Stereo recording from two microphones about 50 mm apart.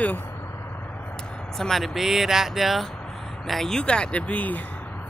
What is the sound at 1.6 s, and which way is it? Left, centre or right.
Speech, centre.